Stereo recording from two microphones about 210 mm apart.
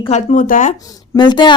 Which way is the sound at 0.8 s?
15° left (ahead or behind).